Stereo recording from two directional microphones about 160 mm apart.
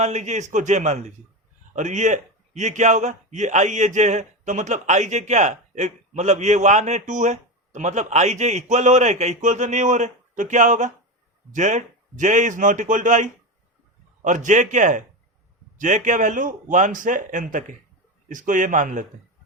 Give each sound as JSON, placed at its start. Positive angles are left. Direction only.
{"t": 0.0, "sound": "a man's voice", "side_deg": -45}